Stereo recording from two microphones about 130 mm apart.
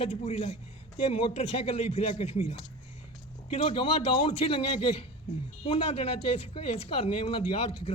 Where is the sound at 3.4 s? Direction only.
40° left (ahead or behind).